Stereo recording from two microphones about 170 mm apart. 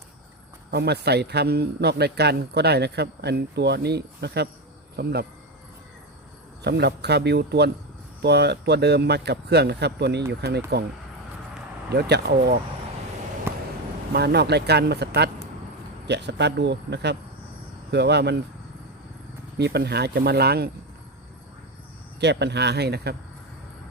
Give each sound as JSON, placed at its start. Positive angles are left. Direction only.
{"t": 0.7, "sound": "speech", "side_deg": -75}
{"t": 6.6, "sound": "speech", "side_deg": -75}
{"t": 11.9, "sound": "speech", "side_deg": -75}
{"t": 14.1, "sound": "speech", "side_deg": -75}
{"t": 16.0, "sound": "speech", "side_deg": -90}
{"t": 19.5, "sound": "speech", "side_deg": -75}
{"t": 22.2, "sound": "speech", "side_deg": -85}